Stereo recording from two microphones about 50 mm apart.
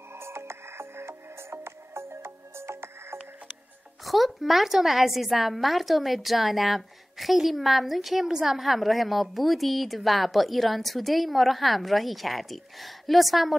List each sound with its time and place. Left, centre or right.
0.1 s music: right
4.0 s a woman's voice: centre